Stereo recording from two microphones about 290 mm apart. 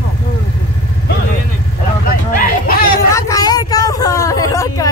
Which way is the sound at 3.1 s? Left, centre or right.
Centre.